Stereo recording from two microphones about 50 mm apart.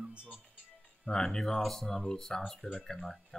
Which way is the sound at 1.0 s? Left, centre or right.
Centre.